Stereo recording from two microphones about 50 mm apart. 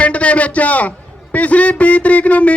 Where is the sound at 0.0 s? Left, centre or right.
Left.